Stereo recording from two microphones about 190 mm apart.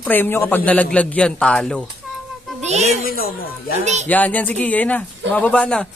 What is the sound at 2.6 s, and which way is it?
Speech, 35° right (ahead or behind).